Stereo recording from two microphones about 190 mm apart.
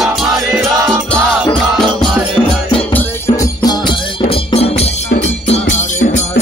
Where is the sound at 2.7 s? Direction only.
10° left (ahead or behind); by 6.2 s 40° left (ahead or behind).